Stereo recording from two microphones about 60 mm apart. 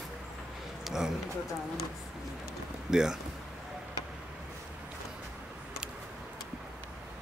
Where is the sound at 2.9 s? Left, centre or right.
Centre.